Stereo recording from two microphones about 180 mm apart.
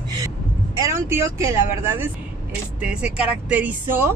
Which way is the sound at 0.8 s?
15° right (ahead or behind).